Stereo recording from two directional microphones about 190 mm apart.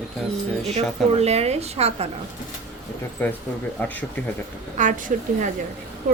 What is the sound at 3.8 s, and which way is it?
Speech, 10° left (ahead or behind).